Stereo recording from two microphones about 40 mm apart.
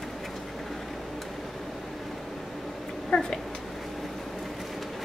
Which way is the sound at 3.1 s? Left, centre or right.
Centre.